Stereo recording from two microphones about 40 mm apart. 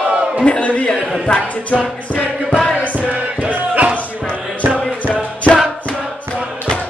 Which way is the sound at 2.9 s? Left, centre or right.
Right.